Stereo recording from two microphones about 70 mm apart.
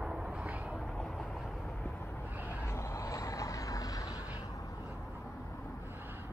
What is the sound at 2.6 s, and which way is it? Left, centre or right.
Vehicle, left.